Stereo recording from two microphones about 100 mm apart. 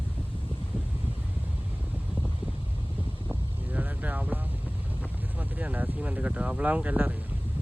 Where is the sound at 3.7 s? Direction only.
15° right (ahead or behind).